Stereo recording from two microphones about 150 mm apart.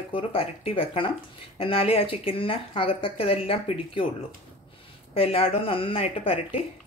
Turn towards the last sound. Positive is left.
turn(degrees=40)  # may be behind; listen again after turning